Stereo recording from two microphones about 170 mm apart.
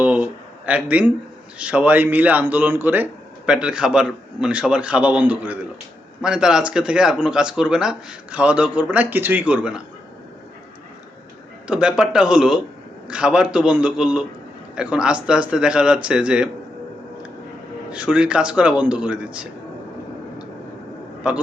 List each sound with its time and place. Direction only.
0.0 s a sound: 10° right (ahead or behind)
1.5 s speech: 5° right (ahead or behind)
11.7 s speech: 5° right (ahead or behind)
17.9 s speech: 5° right (ahead or behind)
21.2 s speech: 5° right (ahead or behind)